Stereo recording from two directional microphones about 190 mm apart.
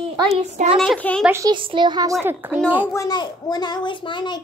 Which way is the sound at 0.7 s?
5° left (ahead or behind).